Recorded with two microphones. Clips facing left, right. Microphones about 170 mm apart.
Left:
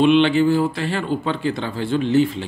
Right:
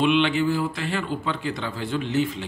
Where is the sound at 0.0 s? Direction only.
30° left (ahead or behind).